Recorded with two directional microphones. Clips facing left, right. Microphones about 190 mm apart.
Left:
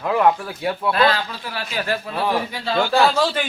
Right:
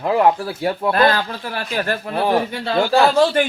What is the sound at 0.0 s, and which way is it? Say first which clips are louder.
Speech: right 2 dB; 30° right (ahead or behind).